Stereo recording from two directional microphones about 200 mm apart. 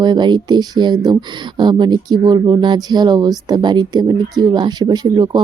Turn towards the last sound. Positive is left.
turn(degrees=-20)  # may be behind; listen again after turning